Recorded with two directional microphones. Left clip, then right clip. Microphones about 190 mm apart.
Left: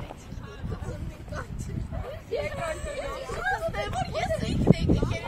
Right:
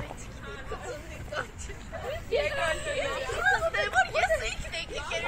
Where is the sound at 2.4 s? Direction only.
50° left (ahead or behind).